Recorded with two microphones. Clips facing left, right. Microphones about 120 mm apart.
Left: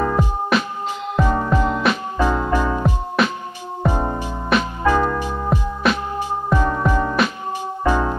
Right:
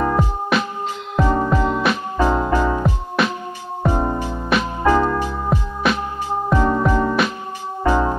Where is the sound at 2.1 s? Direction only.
15° right (ahead or behind).